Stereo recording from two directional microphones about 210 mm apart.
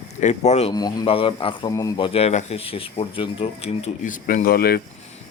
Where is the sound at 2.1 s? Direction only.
30° left (ahead or behind).